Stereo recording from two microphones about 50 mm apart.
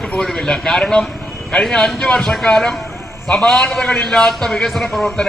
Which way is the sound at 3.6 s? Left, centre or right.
Centre.